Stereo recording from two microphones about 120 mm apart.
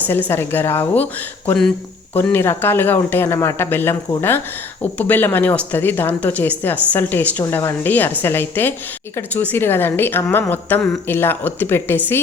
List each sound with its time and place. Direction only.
0.1 s speech: 20° left (ahead or behind)
2.1 s speech: 15° left (ahead or behind)